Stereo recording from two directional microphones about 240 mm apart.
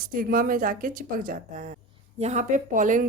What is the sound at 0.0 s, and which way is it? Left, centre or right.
A woman's voice, right.